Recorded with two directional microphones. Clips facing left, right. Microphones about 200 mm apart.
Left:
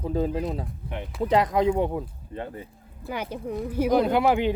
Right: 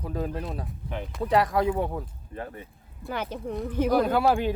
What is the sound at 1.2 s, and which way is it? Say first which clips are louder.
Speech: left 2 dB; 20° left (ahead or behind).